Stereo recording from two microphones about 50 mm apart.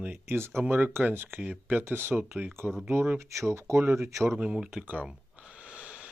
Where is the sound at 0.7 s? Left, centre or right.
Right.